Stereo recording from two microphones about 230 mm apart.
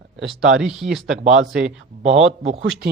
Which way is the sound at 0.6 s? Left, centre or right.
Centre.